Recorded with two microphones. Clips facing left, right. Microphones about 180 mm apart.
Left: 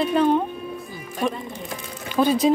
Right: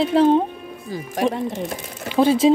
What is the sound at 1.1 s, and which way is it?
Speech, 90° right.